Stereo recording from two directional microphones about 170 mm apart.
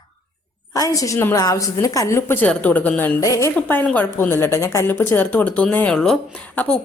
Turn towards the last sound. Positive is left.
turn(degrees=5)  # may be behind; listen again after turning